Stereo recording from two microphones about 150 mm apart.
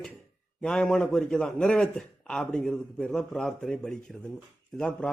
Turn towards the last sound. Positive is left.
turn(degrees=5)  # may be behind; listen again after turning